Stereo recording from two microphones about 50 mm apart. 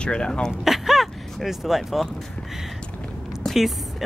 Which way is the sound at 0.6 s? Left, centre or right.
Centre.